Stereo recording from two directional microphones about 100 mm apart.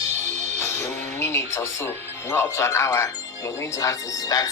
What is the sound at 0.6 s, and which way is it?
Speech, 25° left (ahead or behind).